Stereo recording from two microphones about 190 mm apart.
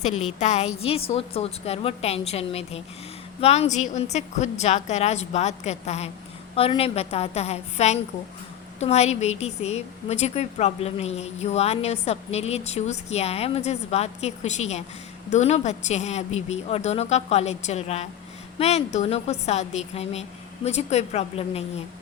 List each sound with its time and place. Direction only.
0.0 s a woman's voice: 35° left (ahead or behind)